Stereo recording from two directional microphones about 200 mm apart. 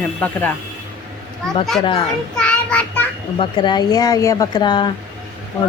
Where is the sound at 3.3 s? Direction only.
25° left (ahead or behind).